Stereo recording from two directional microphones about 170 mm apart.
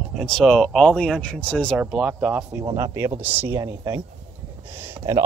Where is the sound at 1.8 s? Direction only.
5° right (ahead or behind).